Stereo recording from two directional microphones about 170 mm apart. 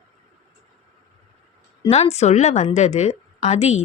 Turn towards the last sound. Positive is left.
turn(degrees=40)  # may be behind; listen again after turning